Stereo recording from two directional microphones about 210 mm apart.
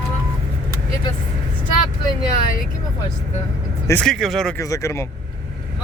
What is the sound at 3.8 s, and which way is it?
Speech, 5° left (ahead or behind).